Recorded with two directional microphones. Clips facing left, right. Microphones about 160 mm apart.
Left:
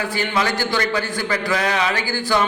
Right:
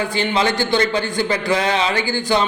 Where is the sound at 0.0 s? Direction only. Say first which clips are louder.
Right 3 dB; 20° right (ahead or behind).